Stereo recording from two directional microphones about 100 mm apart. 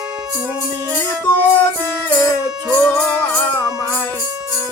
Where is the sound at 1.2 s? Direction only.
20° left (ahead or behind).